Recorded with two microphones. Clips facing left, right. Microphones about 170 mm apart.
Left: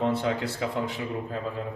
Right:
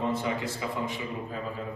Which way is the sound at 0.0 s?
75° left (ahead or behind).